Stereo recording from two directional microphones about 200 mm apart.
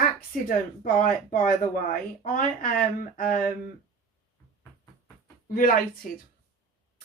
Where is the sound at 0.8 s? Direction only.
45° left (ahead or behind).